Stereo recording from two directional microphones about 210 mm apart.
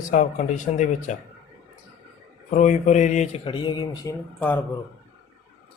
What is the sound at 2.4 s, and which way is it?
Speech, 35° left (ahead or behind).